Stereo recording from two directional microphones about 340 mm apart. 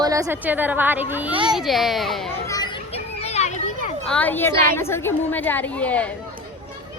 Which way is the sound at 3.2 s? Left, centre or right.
Centre.